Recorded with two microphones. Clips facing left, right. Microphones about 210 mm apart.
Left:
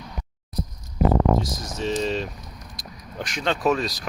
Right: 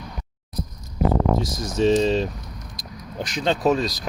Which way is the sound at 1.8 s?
30° right (ahead or behind).